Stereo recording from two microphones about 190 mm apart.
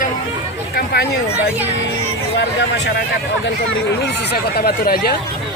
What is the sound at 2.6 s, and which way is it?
Speech, 65° left (ahead or behind).